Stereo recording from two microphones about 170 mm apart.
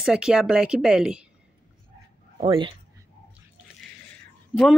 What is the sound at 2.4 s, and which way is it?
Speech, 30° right (ahead or behind).